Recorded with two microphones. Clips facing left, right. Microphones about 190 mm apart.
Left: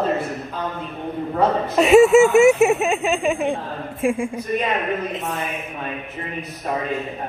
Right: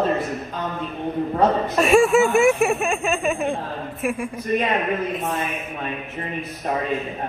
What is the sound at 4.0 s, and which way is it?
Speech, 25° left (ahead or behind).